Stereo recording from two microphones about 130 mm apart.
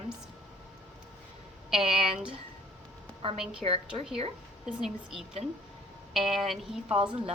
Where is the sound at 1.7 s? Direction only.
5° right (ahead or behind).